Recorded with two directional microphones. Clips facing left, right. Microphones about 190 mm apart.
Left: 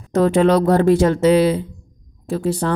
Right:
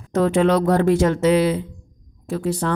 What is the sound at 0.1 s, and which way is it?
Speech, 35° left (ahead or behind).